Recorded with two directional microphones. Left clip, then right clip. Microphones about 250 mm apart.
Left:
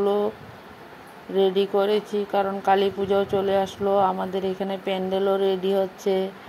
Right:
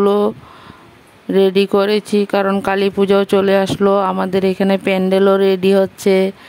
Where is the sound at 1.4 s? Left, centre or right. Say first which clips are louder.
Right 7 dB; right.